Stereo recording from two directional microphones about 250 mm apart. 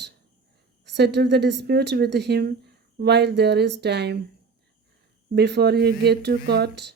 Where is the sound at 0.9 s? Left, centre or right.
Right.